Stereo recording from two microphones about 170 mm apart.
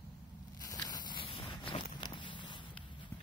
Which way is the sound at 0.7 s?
20° left (ahead or behind).